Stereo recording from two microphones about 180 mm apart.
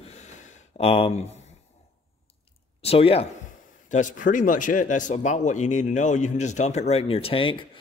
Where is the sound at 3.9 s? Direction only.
45° left (ahead or behind).